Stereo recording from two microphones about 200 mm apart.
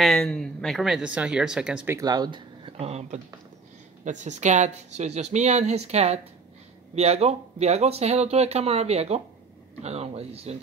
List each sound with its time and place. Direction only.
0.0 s speech: 5° left (ahead or behind)
2.0 s speech: 20° right (ahead or behind)